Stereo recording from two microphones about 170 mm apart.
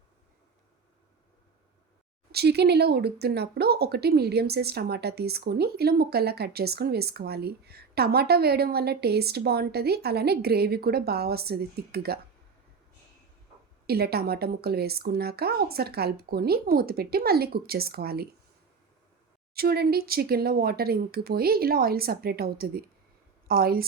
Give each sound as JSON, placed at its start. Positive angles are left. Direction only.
{"t": 2.3, "sound": "speech", "side_deg": -70}
{"t": 13.8, "sound": "speech", "side_deg": -65}
{"t": 19.5, "sound": "speech", "side_deg": -65}